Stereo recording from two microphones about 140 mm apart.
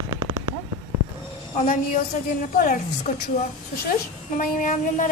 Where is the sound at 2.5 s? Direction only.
75° left (ahead or behind).